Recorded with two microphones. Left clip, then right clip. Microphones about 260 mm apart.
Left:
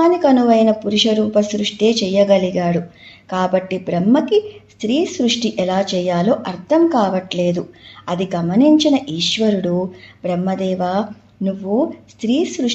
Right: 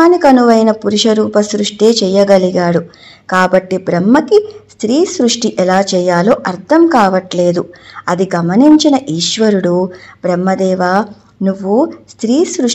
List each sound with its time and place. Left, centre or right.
0.0 s speech: right